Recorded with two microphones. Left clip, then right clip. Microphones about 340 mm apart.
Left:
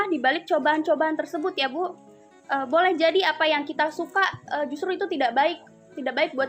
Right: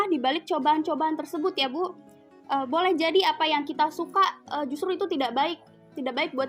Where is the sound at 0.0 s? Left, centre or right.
Centre.